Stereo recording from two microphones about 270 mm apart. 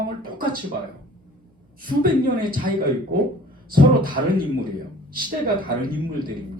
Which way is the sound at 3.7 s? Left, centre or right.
Right.